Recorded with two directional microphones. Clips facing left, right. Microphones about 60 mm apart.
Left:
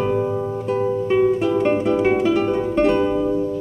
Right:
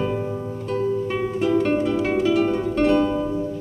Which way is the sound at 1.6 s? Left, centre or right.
Centre.